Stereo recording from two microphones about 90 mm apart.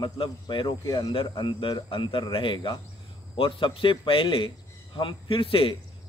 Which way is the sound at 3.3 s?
85° left.